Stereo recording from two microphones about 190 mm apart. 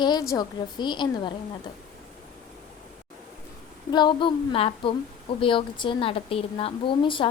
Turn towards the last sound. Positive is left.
turn(degrees=25)  # may be behind; listen again after turning